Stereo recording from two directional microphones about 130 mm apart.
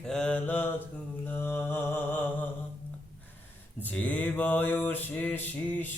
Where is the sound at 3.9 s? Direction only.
10° left (ahead or behind).